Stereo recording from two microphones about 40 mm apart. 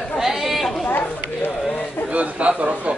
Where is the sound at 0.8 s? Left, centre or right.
Left.